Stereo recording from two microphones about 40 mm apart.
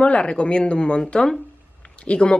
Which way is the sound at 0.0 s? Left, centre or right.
Left.